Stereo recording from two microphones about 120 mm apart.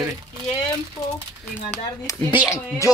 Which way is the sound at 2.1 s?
25° left (ahead or behind).